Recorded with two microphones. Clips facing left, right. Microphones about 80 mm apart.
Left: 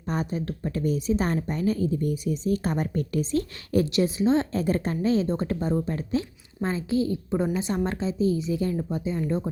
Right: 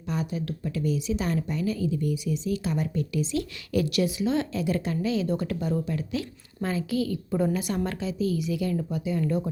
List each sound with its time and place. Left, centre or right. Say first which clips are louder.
0.0 s a woman's voice: left 2 dB; left